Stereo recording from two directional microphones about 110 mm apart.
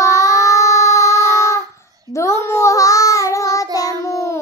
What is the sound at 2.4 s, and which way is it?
Child singing, 25° left (ahead or behind).